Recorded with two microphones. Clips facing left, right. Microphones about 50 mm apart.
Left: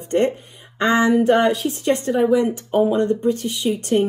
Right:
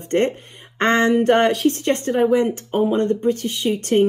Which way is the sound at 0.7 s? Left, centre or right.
Right.